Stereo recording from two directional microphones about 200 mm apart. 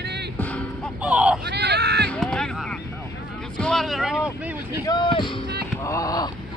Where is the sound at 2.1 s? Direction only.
5° left (ahead or behind).